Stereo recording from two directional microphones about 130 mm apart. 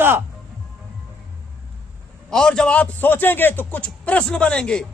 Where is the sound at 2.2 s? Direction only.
5° left (ahead or behind).